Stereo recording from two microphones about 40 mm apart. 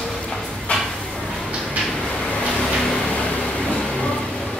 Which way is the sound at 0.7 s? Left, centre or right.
Left.